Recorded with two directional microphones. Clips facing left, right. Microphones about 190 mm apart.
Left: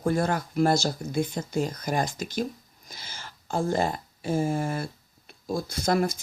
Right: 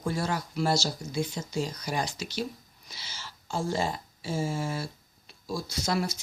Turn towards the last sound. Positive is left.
turn(degrees=50)  # may be behind; listen again after turning